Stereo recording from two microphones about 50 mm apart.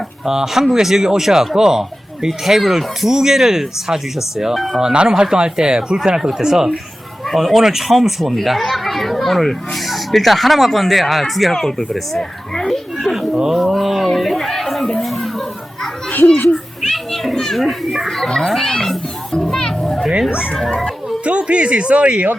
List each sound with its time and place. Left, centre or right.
0.3 s speech: centre
4.8 s a child's voice: centre
11.5 s speech: centre
12.5 s a sound: centre
13.5 s speech: centre
15.0 s chatter: centre
15.4 s children playing: centre
21.2 s a man's voice: right